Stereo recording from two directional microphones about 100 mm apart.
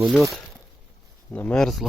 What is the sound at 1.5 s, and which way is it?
Speech, 5° left (ahead or behind).